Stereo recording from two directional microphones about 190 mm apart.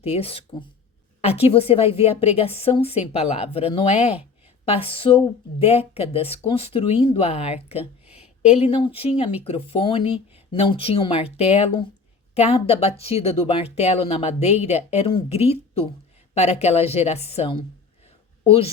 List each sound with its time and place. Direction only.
0.0 s speech: 30° left (ahead or behind)
8.0 s a sound: 5° right (ahead or behind)
8.4 s a woman's voice: 35° left (ahead or behind)